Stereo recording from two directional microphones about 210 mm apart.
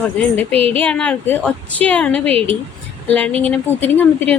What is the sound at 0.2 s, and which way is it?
A woman's voice, 5° left (ahead or behind).